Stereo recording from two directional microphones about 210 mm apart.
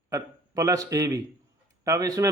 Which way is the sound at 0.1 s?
15° right (ahead or behind).